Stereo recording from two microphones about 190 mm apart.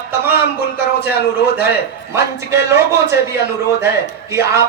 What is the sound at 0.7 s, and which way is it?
Speech, 60° left (ahead or behind).